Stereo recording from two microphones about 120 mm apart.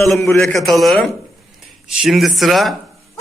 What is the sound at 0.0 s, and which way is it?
Speech, centre (ahead or behind).